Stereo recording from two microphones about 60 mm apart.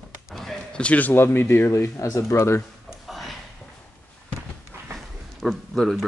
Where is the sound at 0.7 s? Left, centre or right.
Left.